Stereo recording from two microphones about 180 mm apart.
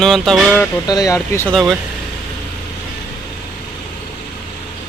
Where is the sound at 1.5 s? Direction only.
Centre (ahead or behind).